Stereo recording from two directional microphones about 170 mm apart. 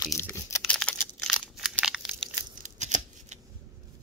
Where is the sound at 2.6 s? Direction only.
45° right (ahead or behind).